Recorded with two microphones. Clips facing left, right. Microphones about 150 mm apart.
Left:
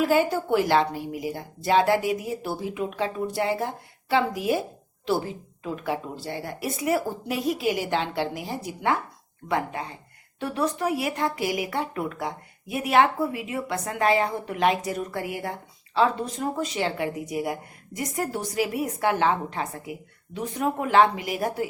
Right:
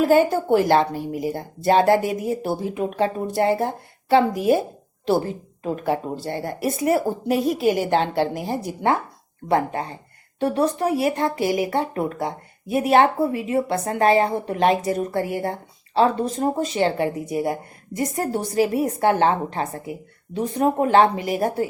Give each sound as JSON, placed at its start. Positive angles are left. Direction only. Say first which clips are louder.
{"t": 0.0, "sound": "a woman's voice", "louder": "right 5 dB", "side_deg": -50}